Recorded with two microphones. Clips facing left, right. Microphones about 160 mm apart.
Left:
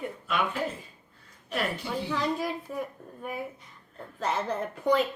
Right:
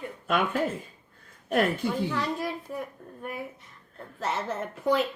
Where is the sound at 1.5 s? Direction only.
50° right (ahead or behind).